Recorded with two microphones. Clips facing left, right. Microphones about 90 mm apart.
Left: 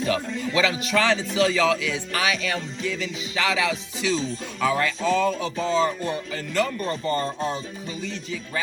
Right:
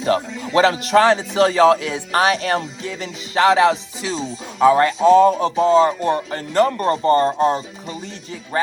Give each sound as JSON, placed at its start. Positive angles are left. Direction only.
{"t": 0.5, "sound": "speech", "side_deg": -50}
{"t": 0.9, "sound": "music", "side_deg": -40}
{"t": 6.0, "sound": "speech", "side_deg": -55}